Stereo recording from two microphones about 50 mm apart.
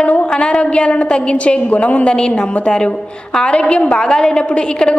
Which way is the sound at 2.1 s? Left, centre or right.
Centre.